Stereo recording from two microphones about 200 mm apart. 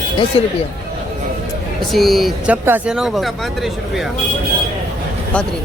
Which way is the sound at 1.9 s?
Centre (ahead or behind).